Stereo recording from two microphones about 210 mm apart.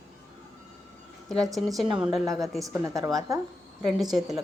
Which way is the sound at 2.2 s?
15° right (ahead or behind).